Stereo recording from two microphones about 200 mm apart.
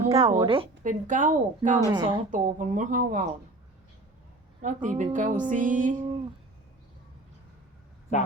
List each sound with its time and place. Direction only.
0.2 s a woman's voice: 25° right (ahead or behind)
0.9 s a woman's voice: 40° right (ahead or behind)
1.9 s a woman's voice: 20° right (ahead or behind)
2.3 s a woman's voice: 40° right (ahead or behind)
4.6 s a woman's voice: 40° right (ahead or behind)